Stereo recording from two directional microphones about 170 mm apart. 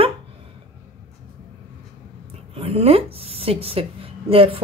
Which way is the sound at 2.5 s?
35° right (ahead or behind).